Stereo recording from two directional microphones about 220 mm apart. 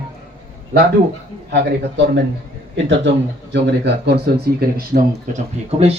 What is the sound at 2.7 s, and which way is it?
A man's voice, 55° right (ahead or behind).